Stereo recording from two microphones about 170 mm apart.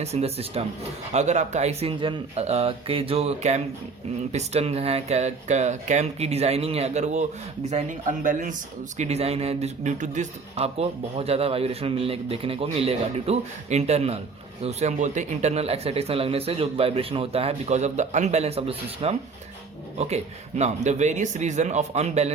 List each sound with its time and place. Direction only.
0.0 s a man's voice: 40° right (ahead or behind)
9.0 s a man's voice: 40° right (ahead or behind)